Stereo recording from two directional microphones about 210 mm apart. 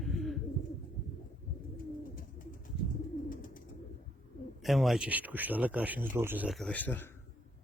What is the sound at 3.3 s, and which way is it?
Bird, 40° left (ahead or behind).